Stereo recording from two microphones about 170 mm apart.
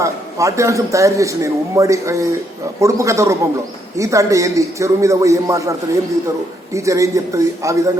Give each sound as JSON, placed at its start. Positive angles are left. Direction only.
{"t": 0.0, "sound": "a man's voice", "side_deg": -20}
{"t": 6.7, "sound": "a man's voice", "side_deg": -20}